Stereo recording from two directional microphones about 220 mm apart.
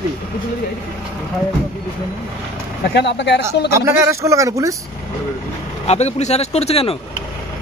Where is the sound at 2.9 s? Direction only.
50° left (ahead or behind).